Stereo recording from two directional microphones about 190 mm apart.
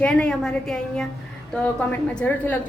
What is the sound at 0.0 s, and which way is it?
A woman's voice, 5° left (ahead or behind).